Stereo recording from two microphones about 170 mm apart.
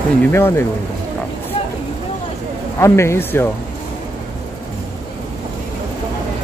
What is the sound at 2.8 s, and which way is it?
Speech, 15° left (ahead or behind).